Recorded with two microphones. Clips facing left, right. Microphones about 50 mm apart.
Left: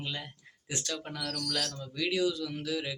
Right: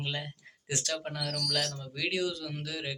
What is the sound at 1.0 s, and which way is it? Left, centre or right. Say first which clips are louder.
Speech: right 1 dB; right.